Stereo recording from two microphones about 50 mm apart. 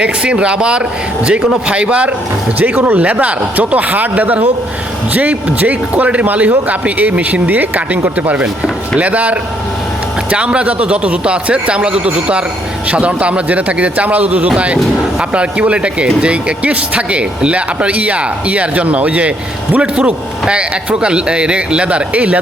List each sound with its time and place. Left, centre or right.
0.0 s speech: right
2.6 s speech: right